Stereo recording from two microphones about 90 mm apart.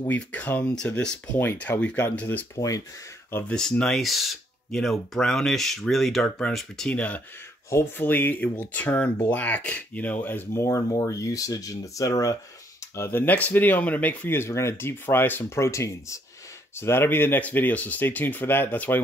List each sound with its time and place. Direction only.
0.1 s speech: 15° left (ahead or behind)
2.5 s speech: 40° left (ahead or behind)
3.4 s speech: 10° left (ahead or behind)
7.7 s speech: 25° left (ahead or behind)
12.9 s speech: 25° left (ahead or behind)